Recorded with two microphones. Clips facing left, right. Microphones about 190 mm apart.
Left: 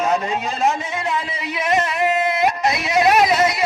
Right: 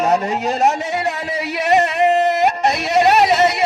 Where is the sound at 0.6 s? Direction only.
40° right (ahead or behind).